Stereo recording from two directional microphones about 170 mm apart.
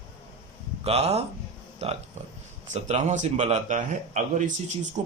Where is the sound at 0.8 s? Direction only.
35° right (ahead or behind).